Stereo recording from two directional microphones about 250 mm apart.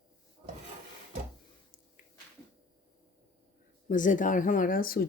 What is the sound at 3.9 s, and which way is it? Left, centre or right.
Speech, left.